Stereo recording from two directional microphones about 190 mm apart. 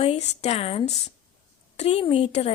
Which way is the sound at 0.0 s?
35° left (ahead or behind).